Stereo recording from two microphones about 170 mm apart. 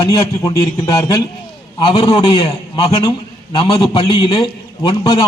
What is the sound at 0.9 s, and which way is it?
A man's voice, 20° left (ahead or behind).